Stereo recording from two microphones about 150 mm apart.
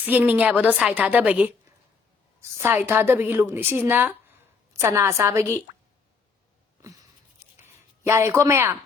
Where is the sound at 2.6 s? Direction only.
15° right (ahead or behind).